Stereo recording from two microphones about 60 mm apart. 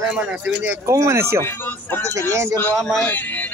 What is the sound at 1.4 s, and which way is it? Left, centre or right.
Speech, left.